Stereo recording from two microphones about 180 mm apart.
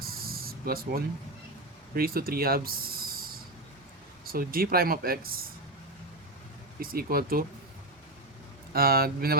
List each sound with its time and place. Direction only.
0.0 s spray: 55° right (ahead or behind)
2.0 s speech: 55° right (ahead or behind)
4.3 s speech: 55° right (ahead or behind)
6.7 s speech: 55° right (ahead or behind)
8.7 s speech: 55° right (ahead or behind)